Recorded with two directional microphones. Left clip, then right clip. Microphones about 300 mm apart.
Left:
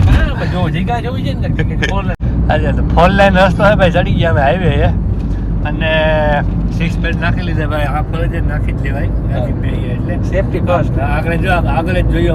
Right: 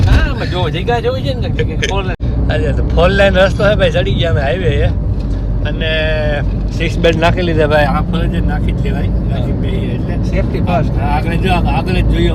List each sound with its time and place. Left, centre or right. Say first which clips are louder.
1.5 s speech: even; centre
7.0 s speech: right 9 dB; centre
7.6 s speech: right 8 dB; right
11.3 s speech: left 1 dB; centre